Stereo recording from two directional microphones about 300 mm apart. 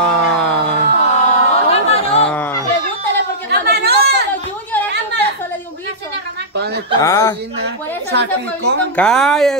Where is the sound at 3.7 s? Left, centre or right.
Right.